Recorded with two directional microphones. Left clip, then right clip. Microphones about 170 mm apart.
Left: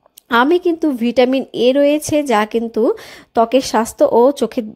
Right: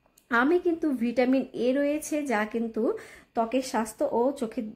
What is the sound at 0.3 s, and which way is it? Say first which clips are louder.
A woman's voice: left 10 dB; 35° left (ahead or behind).